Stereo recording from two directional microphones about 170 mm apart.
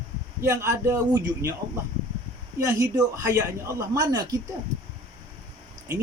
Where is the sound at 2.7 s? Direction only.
15° right (ahead or behind).